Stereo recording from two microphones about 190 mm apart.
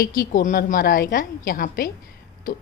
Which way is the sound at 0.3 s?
45° left (ahead or behind).